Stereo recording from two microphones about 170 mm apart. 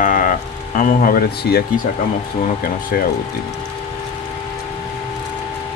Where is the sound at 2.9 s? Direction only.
60° left (ahead or behind).